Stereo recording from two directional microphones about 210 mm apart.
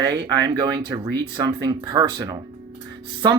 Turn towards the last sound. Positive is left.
turn(degrees=-20)  # may be behind; listen again after turning